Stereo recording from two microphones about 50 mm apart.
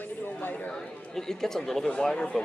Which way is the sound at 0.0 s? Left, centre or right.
Left.